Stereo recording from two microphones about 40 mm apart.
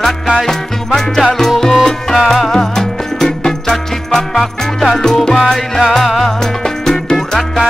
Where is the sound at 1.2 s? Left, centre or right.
Centre.